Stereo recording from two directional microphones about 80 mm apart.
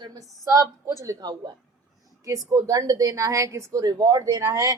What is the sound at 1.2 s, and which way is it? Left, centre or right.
Speech, right.